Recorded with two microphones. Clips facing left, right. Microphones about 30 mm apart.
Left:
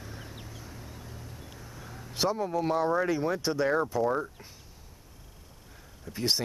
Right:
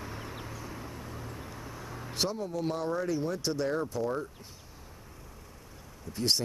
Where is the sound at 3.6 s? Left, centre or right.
Left.